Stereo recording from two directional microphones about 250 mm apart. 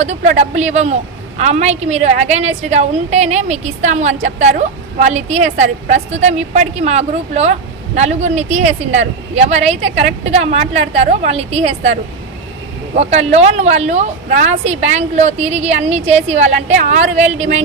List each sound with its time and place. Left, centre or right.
0.0 s a woman's voice: right
13.0 s a woman's voice: right